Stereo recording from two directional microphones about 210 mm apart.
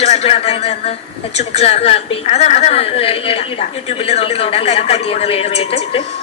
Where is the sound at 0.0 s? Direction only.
30° left (ahead or behind).